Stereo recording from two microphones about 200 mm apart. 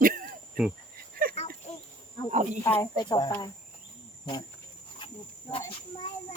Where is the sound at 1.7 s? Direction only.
30° left (ahead or behind).